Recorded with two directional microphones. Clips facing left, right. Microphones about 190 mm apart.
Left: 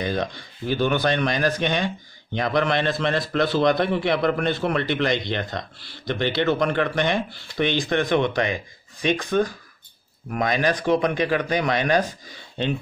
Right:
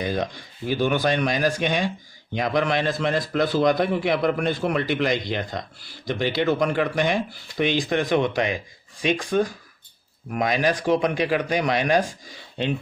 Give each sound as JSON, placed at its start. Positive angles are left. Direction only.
{"t": 0.0, "sound": "speech", "side_deg": -5}